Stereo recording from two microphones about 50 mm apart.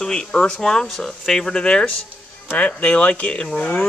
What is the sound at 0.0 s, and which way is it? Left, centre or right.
Speech, centre.